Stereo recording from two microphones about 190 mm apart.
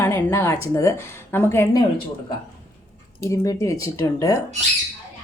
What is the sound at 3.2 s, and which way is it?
A woman's voice, 15° left (ahead or behind).